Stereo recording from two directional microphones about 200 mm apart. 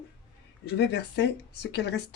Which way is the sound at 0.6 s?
55° left (ahead or behind).